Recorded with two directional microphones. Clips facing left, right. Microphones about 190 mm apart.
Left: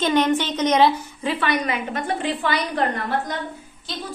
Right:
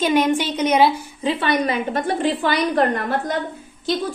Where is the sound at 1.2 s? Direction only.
25° right (ahead or behind).